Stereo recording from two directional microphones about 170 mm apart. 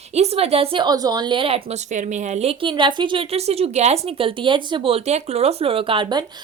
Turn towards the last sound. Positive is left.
turn(degrees=-25)  # may be behind; listen again after turning